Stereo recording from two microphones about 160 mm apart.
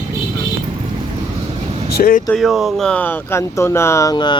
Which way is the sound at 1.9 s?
70° left (ahead or behind).